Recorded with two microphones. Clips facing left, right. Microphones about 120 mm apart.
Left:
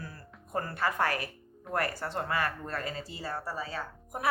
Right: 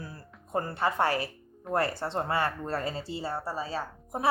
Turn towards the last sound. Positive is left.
turn(degrees=-30)  # may be behind; listen again after turning